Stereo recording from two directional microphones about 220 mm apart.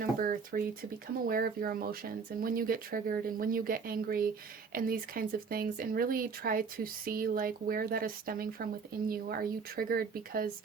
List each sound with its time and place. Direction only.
0.0 s speech: 40° right (ahead or behind)